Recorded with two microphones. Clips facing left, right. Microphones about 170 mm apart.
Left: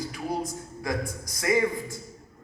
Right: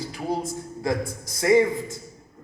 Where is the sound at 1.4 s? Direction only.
25° right (ahead or behind).